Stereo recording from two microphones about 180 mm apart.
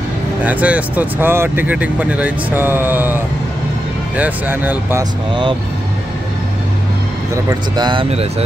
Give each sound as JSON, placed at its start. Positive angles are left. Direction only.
{"t": 0.4, "sound": "speech", "side_deg": -10}
{"t": 4.2, "sound": "speech", "side_deg": -10}
{"t": 7.4, "sound": "speech", "side_deg": -25}